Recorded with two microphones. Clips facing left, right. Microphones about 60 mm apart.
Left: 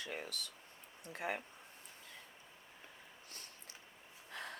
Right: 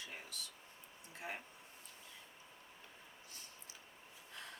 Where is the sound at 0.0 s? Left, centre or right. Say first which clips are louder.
Left 6 dB; left.